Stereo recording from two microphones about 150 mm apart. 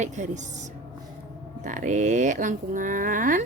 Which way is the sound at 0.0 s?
50° right (ahead or behind).